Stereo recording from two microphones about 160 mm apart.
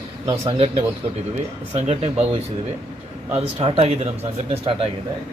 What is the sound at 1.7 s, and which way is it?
Speech, 40° right (ahead or behind).